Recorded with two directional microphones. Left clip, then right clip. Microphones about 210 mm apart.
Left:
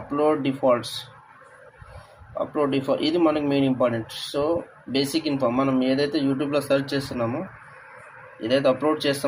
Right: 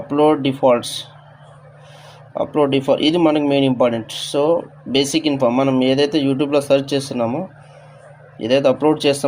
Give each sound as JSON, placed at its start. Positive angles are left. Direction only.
{"t": 0.1, "sound": "speech", "side_deg": -45}
{"t": 2.4, "sound": "speech", "side_deg": -45}
{"t": 8.4, "sound": "speech", "side_deg": -45}